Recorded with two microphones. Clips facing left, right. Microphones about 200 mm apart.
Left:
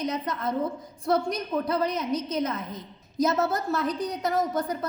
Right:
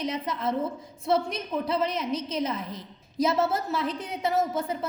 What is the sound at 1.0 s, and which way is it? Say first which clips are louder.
Speech: left 1 dB; 25° right (ahead or behind).